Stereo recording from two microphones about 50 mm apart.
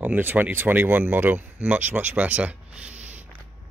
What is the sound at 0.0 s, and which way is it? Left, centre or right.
Speech, right.